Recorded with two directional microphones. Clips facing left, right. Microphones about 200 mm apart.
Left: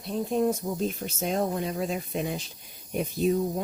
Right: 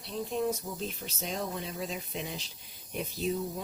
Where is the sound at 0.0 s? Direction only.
45° left (ahead or behind).